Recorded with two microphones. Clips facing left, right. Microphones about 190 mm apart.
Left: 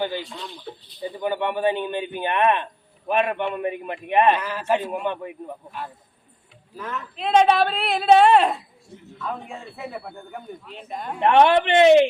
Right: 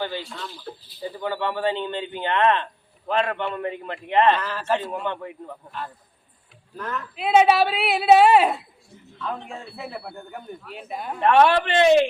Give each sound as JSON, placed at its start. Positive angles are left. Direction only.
{"t": 0.0, "sound": "a man's voice", "side_deg": 15}
{"t": 0.4, "sound": "speech", "side_deg": 0}
{"t": 1.0, "sound": "a man's voice", "side_deg": 20}
{"t": 6.7, "sound": "speech", "side_deg": 5}
{"t": 9.1, "sound": "speech", "side_deg": 5}
{"t": 11.1, "sound": "speech", "side_deg": 20}